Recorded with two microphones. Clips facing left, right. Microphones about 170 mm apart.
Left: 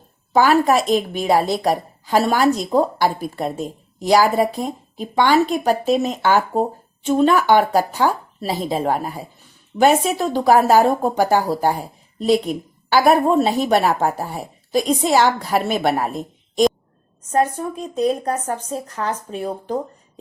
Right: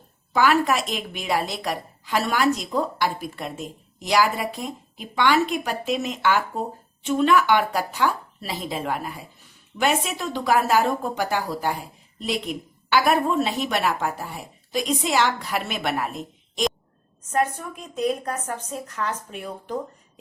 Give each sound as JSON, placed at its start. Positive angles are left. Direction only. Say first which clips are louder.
{"t": 0.3, "sound": "a woman's voice", "louder": "left 5 dB", "side_deg": 35}